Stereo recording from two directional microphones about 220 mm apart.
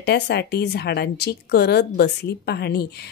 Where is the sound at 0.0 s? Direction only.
50° left (ahead or behind).